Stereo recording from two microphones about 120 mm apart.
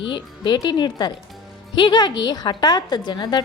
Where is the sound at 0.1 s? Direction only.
35° left (ahead or behind).